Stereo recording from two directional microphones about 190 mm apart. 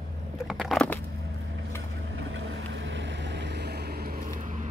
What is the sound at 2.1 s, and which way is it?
Boat, 80° right.